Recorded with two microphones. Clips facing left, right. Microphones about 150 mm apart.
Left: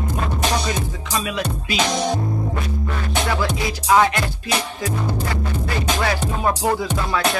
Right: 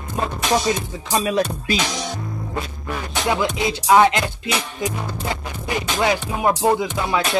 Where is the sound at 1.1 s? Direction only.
40° right (ahead or behind).